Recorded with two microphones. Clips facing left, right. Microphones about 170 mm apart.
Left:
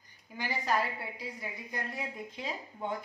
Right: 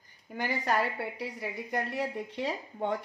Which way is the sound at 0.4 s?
65° right (ahead or behind).